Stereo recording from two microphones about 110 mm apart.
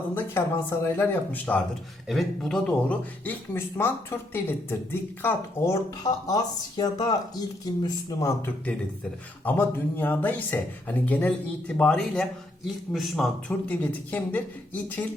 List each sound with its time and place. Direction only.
0.1 s speech: 20° left (ahead or behind)
2.0 s speech: centre (ahead or behind); by 5.7 s 20° left (ahead or behind)
6.2 s speech: 35° left (ahead or behind)
8.4 s speech: 15° left (ahead or behind)
13.7 s speech: 15° left (ahead or behind)